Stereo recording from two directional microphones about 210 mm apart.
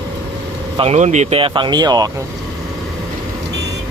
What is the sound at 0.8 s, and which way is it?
Speech, 30° right (ahead or behind).